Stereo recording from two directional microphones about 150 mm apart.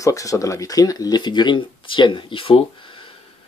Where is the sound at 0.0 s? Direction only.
20° left (ahead or behind).